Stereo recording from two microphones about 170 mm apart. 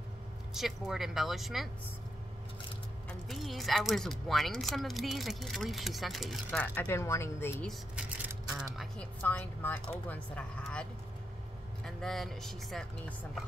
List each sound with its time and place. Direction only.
0.6 s speech: centre (ahead or behind)
3.1 s speech: centre (ahead or behind)
6.6 s speech: 10° left (ahead or behind)
8.5 s speech: centre (ahead or behind)